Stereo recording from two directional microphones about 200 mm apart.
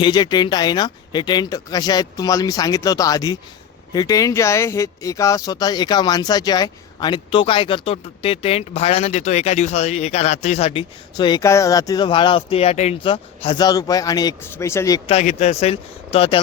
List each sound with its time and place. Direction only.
0.0 s speech: 20° left (ahead or behind)
15.1 s speech: 35° left (ahead or behind)